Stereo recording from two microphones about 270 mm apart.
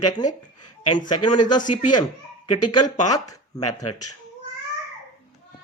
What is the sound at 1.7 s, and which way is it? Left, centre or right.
Speech, left.